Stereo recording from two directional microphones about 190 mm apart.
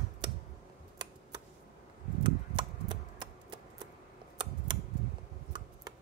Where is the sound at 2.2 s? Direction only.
25° right (ahead or behind).